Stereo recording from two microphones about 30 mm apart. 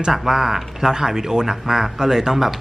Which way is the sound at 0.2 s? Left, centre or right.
Centre.